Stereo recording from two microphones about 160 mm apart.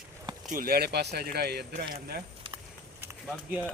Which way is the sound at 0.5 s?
70° right (ahead or behind).